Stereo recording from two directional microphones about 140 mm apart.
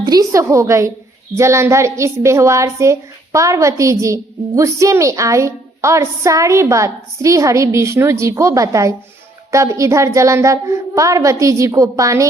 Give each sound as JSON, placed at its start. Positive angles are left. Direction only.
{"t": 0.0, "sound": "a woman's voice", "side_deg": -25}